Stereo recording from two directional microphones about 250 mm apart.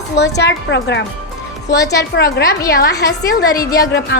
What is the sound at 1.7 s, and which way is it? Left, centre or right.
Speech, centre.